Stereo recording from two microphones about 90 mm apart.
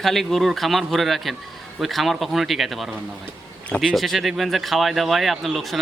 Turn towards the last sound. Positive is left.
turn(degrees=0)  # may be behind; listen again after turning